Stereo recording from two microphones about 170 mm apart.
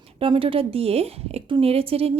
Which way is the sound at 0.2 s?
30° right (ahead or behind).